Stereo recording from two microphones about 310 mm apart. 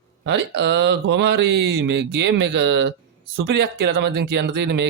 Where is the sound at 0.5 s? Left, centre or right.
Right.